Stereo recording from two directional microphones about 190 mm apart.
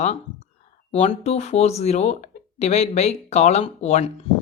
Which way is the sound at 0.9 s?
35° left (ahead or behind).